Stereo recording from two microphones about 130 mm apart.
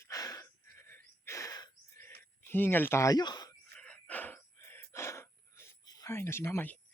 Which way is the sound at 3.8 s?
10° left (ahead or behind).